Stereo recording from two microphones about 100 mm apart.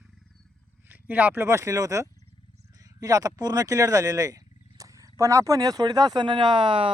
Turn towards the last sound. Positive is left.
turn(degrees=-60)  # may be behind; listen again after turning